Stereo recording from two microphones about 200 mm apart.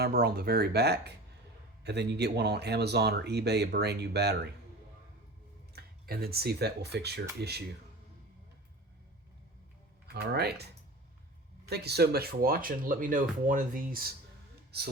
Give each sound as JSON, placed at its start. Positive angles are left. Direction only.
{"t": 0.0, "sound": "speech", "side_deg": -50}
{"t": 5.7, "sound": "speech", "side_deg": -50}
{"t": 10.1, "sound": "speech", "side_deg": -55}
{"t": 11.7, "sound": "speech", "side_deg": -55}